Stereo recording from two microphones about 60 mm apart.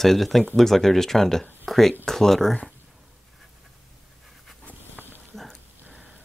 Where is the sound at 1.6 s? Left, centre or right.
Centre.